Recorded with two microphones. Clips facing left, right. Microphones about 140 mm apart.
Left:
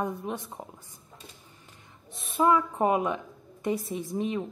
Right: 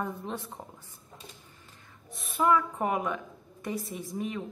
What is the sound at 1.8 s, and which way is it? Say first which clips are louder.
Speech: even; 25° left (ahead or behind).